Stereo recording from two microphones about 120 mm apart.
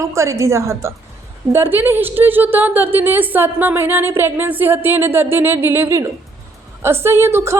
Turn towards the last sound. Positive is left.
turn(degrees=-25)  # may be behind; listen again after turning